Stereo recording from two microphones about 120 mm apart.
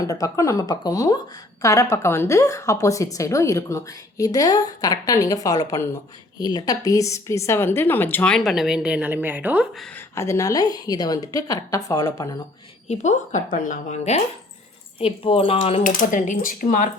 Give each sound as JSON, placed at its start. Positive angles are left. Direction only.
{"t": 0.0, "sound": "a woman's voice", "side_deg": 30}
{"t": 10.2, "sound": "a woman's voice", "side_deg": 25}
{"t": 12.9, "sound": "a woman's voice", "side_deg": 90}
{"t": 14.9, "sound": "speech", "side_deg": 50}